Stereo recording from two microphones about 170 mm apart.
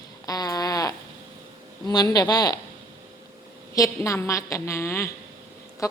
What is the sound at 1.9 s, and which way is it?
Speech, 20° left (ahead or behind).